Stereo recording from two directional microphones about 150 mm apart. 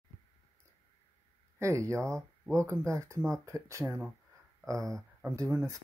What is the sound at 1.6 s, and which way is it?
Speech, 20° right (ahead or behind).